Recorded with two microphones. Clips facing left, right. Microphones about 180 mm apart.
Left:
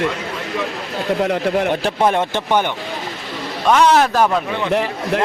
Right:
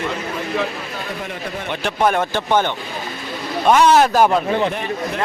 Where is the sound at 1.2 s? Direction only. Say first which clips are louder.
Left 11 dB; 85° left.